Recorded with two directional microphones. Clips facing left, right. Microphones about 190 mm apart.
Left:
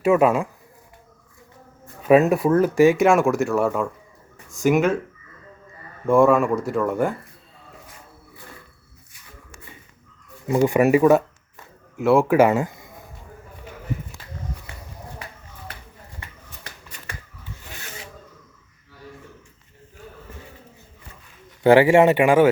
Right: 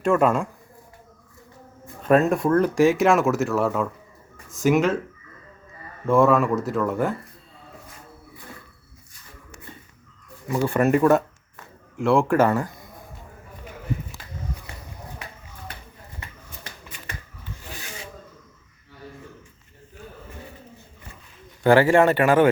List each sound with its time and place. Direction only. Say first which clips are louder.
0.0 s speech: left 2 dB; 5° left (ahead or behind)
2.0 s speech: left 3 dB; 5° left (ahead or behind)
6.1 s speech: left 2 dB; centre (ahead or behind)
10.5 s speech: left 4 dB; 15° left (ahead or behind)
12.5 s speech: left 3 dB; 15° left (ahead or behind)
21.6 s speech: left 3 dB; 20° left (ahead or behind)